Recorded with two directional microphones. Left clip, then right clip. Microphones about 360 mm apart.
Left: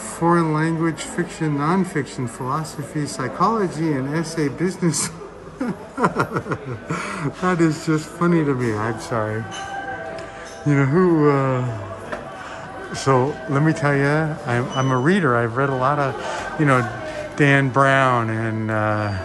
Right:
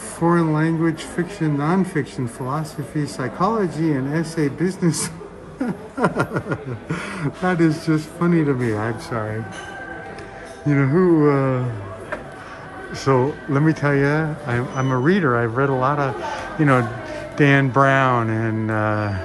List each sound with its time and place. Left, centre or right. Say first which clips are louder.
0.2 s speech: even; centre
10.7 s speech: right 1 dB; centre
12.9 s speech: even; centre